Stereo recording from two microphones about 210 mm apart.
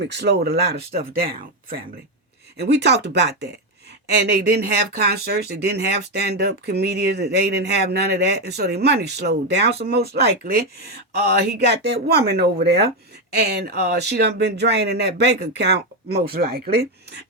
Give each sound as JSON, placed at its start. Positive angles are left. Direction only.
{"t": 0.0, "sound": "speech", "side_deg": -55}